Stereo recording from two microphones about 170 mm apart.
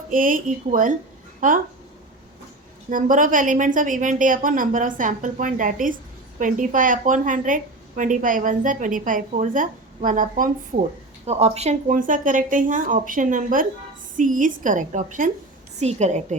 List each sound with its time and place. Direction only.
0.1 s a woman's voice: 55° right (ahead or behind)
2.9 s a woman's voice: 50° right (ahead or behind)
11.3 s a woman's voice: 40° right (ahead or behind)